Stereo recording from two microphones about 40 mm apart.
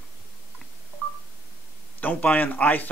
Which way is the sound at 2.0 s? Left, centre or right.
Left.